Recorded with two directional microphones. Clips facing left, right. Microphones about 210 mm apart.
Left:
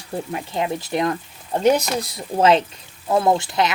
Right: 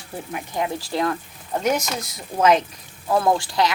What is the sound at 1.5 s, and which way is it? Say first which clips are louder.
Speech: left 5 dB; 30° left (ahead or behind).